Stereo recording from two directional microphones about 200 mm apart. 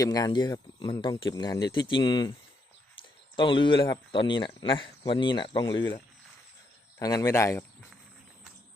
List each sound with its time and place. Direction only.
0.0 s speech: 20° left (ahead or behind)
7.0 s speech: 20° left (ahead or behind)